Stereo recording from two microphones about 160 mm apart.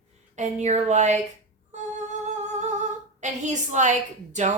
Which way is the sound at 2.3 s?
45° right (ahead or behind).